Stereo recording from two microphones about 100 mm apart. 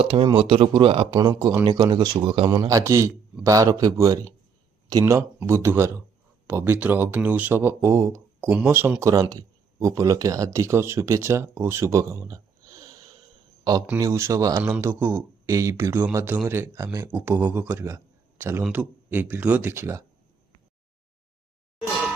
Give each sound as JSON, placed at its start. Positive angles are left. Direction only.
{"t": 0.0, "sound": "a man's voice", "side_deg": -65}
{"t": 1.2, "sound": "speech", "side_deg": -45}
{"t": 2.5, "sound": "a man's voice", "side_deg": -35}
{"t": 8.4, "sound": "a man's voice", "side_deg": -20}
{"t": 14.6, "sound": "speech", "side_deg": -20}